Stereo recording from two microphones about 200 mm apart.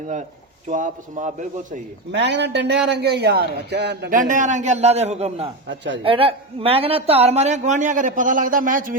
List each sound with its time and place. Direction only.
0.7 s a woman's voice: 40° right (ahead or behind)
2.1 s a man's voice: 60° right (ahead or behind)
4.2 s a woman's voice: 40° right (ahead or behind)
5.6 s a man's voice: 60° right (ahead or behind)
6.0 s a woman's voice: 25° right (ahead or behind); by 9.0 s 45° right (ahead or behind)